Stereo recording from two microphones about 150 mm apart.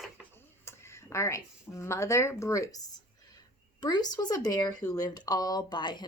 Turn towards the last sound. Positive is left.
turn(degrees=30)  # may be behind; listen again after turning